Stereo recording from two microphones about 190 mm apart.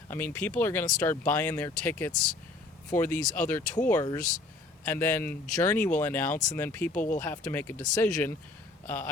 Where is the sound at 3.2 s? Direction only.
45° left (ahead or behind).